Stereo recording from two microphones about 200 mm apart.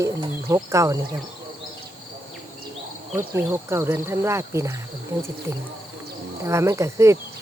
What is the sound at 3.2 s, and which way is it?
Speech, 10° right (ahead or behind).